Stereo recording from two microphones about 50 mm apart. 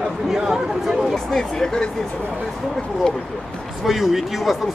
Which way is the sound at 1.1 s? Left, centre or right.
Centre.